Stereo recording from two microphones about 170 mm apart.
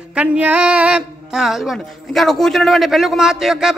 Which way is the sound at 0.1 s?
5° right (ahead or behind).